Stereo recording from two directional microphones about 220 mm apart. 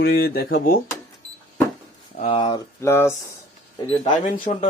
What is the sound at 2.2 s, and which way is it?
Speech, 25° left (ahead or behind).